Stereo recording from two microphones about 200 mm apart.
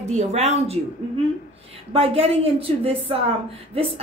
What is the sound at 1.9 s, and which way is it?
A woman's voice, 30° right (ahead or behind).